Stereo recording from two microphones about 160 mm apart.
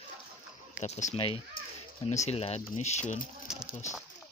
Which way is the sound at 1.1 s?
35° left (ahead or behind).